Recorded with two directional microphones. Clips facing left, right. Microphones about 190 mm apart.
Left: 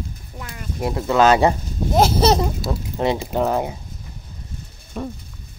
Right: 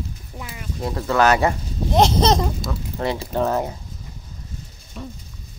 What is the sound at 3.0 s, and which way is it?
Speech, 20° left (ahead or behind).